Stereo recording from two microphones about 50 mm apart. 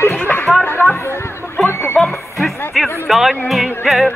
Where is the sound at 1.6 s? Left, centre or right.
Left.